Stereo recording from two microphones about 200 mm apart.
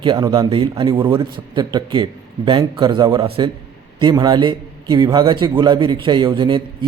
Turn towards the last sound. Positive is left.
turn(degrees=-25)  # may be behind; listen again after turning